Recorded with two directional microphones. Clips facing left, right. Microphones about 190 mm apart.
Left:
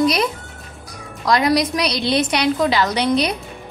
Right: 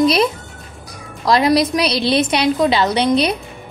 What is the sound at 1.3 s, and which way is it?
A woman's voice, 25° right (ahead or behind).